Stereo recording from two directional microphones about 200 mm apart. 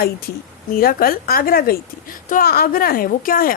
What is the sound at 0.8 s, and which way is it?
A woman's voice, 45° left (ahead or behind).